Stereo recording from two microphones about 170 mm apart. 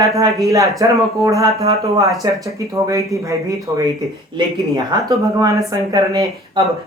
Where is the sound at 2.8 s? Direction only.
20° right (ahead or behind).